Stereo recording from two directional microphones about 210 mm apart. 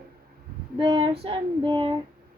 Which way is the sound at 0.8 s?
25° right (ahead or behind).